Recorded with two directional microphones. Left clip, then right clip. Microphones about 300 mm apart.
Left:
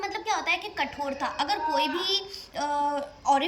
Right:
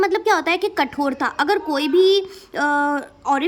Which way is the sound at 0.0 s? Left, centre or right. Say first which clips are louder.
Right 11 dB; centre.